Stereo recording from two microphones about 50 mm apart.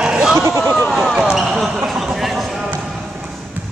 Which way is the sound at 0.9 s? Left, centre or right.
Centre.